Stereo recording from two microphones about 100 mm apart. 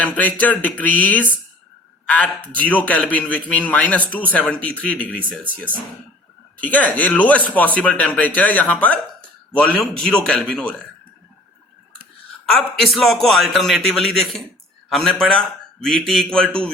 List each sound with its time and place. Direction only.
0.0 s a man's voice: 15° left (ahead or behind)
12.5 s a man's voice: centre (ahead or behind)